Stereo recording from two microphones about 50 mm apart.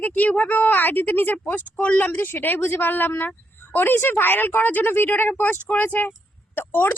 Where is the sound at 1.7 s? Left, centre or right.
Left.